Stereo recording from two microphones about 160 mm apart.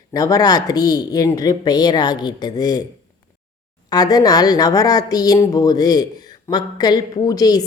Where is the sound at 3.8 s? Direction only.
25° left (ahead or behind).